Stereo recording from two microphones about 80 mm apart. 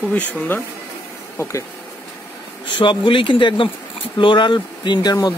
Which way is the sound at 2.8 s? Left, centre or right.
Left.